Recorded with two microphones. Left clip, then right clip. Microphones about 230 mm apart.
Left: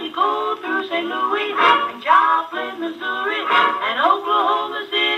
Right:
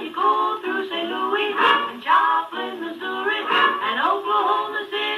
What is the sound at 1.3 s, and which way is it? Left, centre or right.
Music, centre.